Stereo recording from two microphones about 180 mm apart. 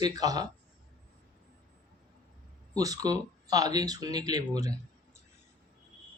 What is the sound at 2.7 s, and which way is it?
Speech, 20° right (ahead or behind).